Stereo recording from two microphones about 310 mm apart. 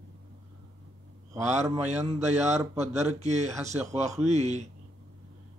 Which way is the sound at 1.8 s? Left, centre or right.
Right.